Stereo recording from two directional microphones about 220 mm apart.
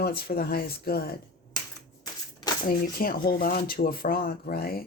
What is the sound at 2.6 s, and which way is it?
Speech, 40° left (ahead or behind).